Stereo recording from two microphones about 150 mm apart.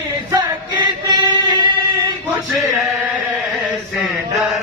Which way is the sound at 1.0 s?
30° right (ahead or behind).